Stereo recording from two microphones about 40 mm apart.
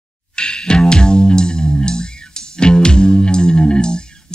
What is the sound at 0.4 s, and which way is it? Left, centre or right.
Music, left.